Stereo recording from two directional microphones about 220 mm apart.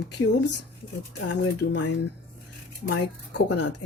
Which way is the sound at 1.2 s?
55° left (ahead or behind).